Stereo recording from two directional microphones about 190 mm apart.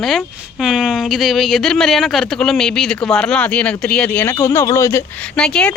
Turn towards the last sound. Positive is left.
turn(degrees=5)  # may be behind; listen again after turning